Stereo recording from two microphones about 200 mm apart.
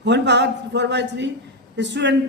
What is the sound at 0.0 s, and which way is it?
A man's voice, 60° right (ahead or behind).